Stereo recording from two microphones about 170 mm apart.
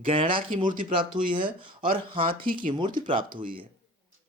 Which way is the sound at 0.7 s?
50° right (ahead or behind).